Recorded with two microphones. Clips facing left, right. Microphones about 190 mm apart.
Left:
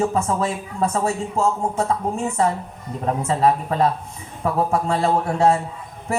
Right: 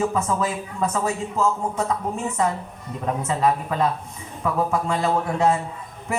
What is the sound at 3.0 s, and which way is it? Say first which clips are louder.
A man's voice: left 3 dB; 35° left (ahead or behind).